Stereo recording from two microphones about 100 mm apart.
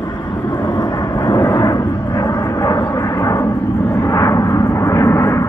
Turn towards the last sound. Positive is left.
turn(degrees=30)  # may be behind; listen again after turning